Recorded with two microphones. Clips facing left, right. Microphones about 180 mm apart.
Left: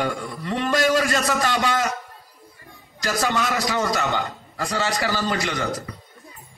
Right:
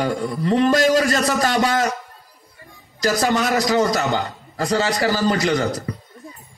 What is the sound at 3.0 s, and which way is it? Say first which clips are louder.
A man's voice: right 5 dB; 40° right (ahead or behind).